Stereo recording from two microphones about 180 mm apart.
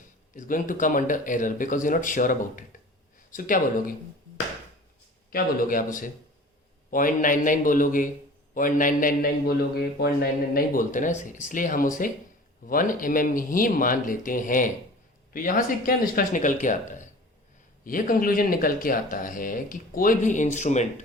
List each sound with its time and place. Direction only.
0.3 s a man's voice: 50° left (ahead or behind)
5.3 s a man's voice: 50° left (ahead or behind)